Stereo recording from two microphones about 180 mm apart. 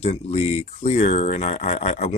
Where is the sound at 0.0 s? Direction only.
35° left (ahead or behind).